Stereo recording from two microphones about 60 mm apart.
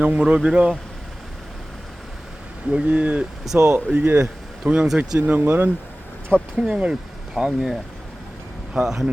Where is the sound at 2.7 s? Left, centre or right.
Right.